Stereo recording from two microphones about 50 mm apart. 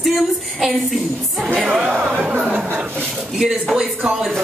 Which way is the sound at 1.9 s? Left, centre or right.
Right.